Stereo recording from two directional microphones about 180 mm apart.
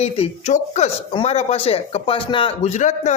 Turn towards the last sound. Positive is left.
turn(degrees=40)  # may be behind; listen again after turning